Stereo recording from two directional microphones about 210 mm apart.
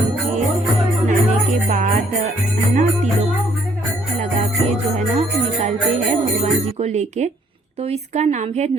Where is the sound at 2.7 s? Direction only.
35° right (ahead or behind).